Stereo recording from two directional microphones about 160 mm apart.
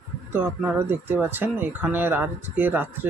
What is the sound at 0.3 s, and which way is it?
Speech, 15° right (ahead or behind).